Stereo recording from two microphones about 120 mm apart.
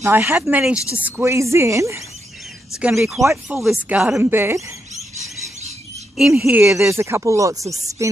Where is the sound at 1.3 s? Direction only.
25° right (ahead or behind).